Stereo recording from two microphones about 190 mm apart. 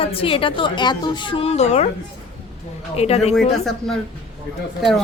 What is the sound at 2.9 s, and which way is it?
Speech, 35° left (ahead or behind).